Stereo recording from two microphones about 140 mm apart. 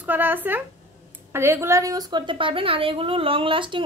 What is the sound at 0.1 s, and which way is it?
A woman's voice, 15° right (ahead or behind).